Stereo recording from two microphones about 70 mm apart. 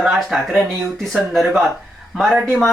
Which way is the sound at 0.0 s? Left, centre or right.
Centre.